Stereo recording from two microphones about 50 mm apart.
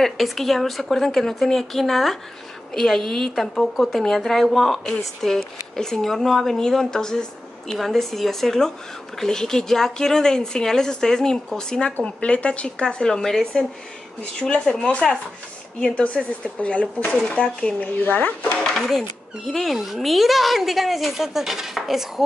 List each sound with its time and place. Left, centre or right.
0.0 s a child's voice: centre
17.7 s speech: left
18.7 s a child's voice: centre